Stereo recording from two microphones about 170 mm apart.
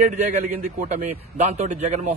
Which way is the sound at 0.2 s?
45° right (ahead or behind).